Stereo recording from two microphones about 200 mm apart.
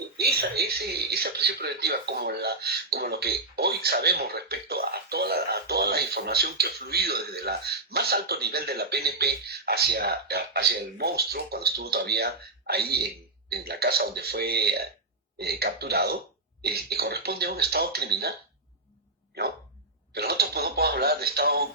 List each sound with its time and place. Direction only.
0.2 s speech: 50° right (ahead or behind)
19.4 s speech: 55° right (ahead or behind)